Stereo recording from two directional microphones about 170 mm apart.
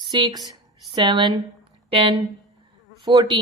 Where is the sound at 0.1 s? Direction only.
25° right (ahead or behind).